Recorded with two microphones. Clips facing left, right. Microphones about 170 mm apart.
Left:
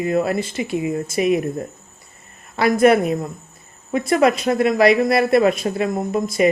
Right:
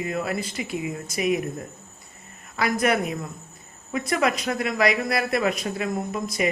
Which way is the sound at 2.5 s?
30° left (ahead or behind).